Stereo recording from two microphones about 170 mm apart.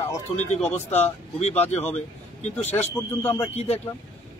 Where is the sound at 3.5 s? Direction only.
35° left (ahead or behind).